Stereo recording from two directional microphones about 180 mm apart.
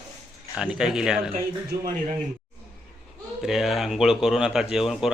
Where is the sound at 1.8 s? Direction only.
50° right (ahead or behind).